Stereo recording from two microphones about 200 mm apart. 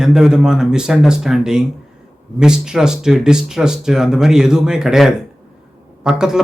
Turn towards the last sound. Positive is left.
turn(degrees=-5)  # may be behind; listen again after turning